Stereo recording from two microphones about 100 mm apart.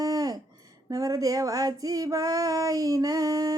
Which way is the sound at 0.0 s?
40° right (ahead or behind).